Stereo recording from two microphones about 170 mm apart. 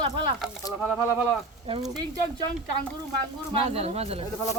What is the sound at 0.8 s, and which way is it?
Speech, 5° right (ahead or behind).